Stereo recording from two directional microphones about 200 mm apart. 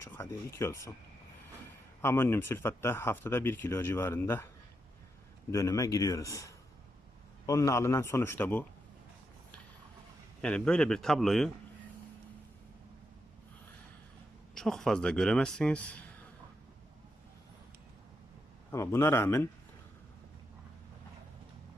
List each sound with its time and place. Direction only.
0.0 s speech: 15° left (ahead or behind)
2.0 s speech: 10° left (ahead or behind)
5.5 s speech: 15° left (ahead or behind)
10.4 s speech: 5° left (ahead or behind)
14.5 s speech: centre (ahead or behind)
18.7 s speech: 15° left (ahead or behind)